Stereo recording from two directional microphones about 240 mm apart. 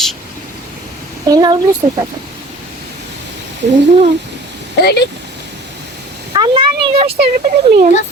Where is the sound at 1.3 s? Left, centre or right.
Centre.